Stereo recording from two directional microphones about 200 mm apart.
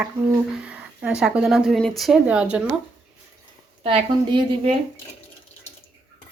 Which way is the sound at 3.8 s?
25° right (ahead or behind).